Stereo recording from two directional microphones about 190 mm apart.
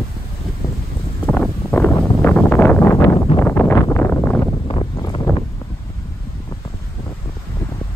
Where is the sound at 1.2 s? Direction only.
5° left (ahead or behind).